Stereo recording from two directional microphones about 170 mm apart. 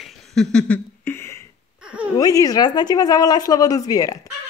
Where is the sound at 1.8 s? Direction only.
5° right (ahead or behind).